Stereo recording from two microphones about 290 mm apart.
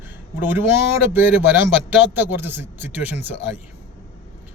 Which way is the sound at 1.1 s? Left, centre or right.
Centre.